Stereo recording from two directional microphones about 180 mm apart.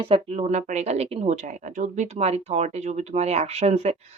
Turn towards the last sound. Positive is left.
turn(degrees=-35)  # may be behind; listen again after turning